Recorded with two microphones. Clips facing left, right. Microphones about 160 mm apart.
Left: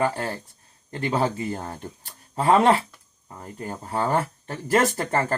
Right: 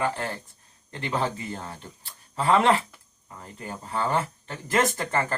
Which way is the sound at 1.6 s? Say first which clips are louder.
Left 5 dB; 45° left (ahead or behind).